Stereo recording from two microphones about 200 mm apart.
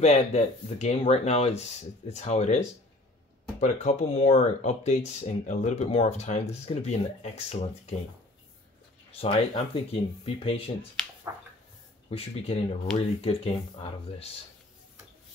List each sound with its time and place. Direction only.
0.0 s speech: 30° left (ahead or behind)
3.6 s speech: 35° left (ahead or behind)
9.2 s speech: 30° left (ahead or behind)
12.1 s speech: 30° left (ahead or behind)